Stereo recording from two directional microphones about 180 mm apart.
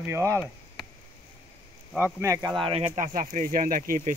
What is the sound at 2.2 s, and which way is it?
Speech, 20° right (ahead or behind).